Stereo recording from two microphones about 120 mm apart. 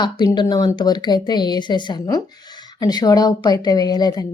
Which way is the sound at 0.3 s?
35° left (ahead or behind).